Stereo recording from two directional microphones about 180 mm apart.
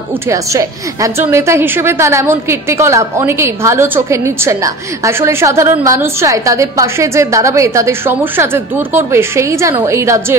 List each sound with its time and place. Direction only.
0.3 s a woman's voice: 15° right (ahead or behind)